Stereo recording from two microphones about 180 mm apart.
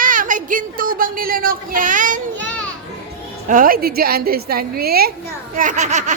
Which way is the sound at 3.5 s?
50° right (ahead or behind).